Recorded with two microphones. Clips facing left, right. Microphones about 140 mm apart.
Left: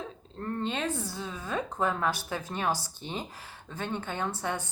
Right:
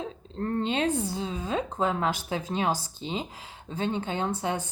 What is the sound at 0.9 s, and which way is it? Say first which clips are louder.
Speech: right 6 dB; 15° right (ahead or behind).